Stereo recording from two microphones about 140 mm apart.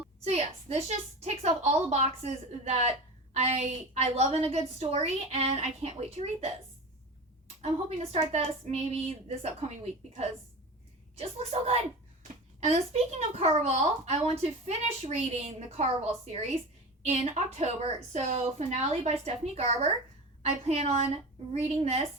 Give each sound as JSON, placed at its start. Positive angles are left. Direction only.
{"t": 0.3, "sound": "a child's voice", "side_deg": -50}